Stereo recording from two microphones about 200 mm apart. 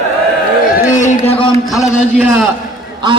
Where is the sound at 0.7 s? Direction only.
35° left (ahead or behind).